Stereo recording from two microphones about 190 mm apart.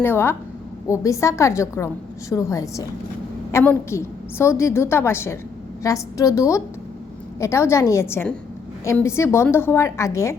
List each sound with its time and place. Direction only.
0.0 s a woman's voice: 10° left (ahead or behind)